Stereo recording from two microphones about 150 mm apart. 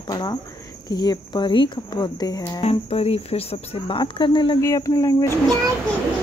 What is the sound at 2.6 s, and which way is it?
Speech, 40° left (ahead or behind).